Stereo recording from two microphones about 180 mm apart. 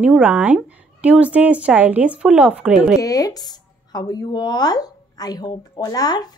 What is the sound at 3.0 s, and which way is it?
Speech, 20° left (ahead or behind).